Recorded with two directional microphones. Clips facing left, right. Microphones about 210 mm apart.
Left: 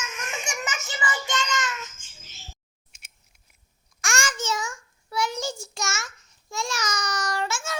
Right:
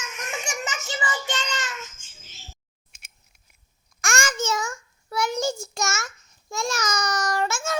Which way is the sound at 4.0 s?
50° right (ahead or behind).